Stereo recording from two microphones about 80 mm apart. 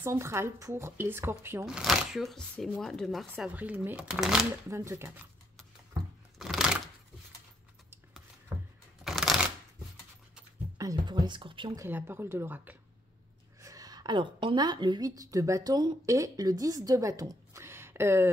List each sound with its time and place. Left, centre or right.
0.0 s a woman's voice: right
1.7 s speech: centre
3.4 s speech: centre
4.1 s speech: centre
4.6 s a woman's voice: right
6.3 s a sound: centre
8.5 s a sound: right
9.0 s shuffling cards: centre
11.1 s speech: right
11.9 s speech: right
13.6 s a woman's voice: right
15.0 s a woman's voice: right
17.6 s a sound: right